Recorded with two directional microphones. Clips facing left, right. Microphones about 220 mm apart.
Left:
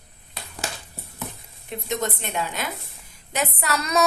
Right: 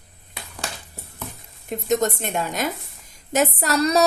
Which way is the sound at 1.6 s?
45° right (ahead or behind).